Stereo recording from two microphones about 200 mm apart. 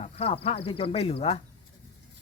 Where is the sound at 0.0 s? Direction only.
30° left (ahead or behind).